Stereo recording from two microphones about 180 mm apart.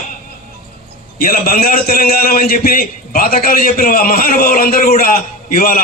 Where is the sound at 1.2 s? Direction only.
55° left (ahead or behind).